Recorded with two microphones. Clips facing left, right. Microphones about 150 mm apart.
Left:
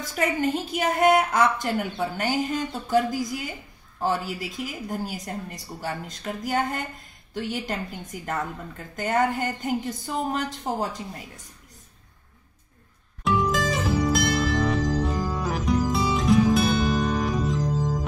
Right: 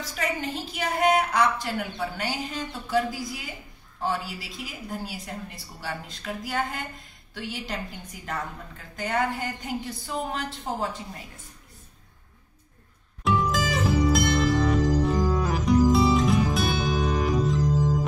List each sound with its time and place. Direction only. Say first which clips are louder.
0.0 s a woman's voice: left 5 dB; 50° left (ahead or behind)
13.2 s music: left 1 dB; centre (ahead or behind)
17.6 s music: right 2 dB; 10° left (ahead or behind)